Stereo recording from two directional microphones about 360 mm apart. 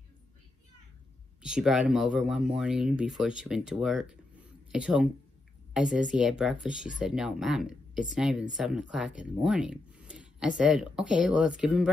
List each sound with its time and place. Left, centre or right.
1.4 s speech: centre